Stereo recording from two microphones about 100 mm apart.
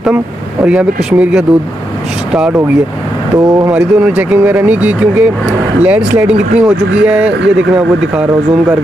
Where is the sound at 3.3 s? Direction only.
35° right (ahead or behind).